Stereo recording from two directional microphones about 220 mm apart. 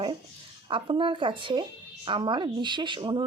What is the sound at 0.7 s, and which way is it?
Speech, 25° right (ahead or behind).